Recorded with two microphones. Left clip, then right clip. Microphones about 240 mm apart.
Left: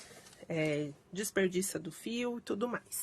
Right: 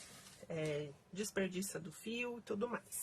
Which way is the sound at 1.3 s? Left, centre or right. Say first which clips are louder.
Left 9 dB; left.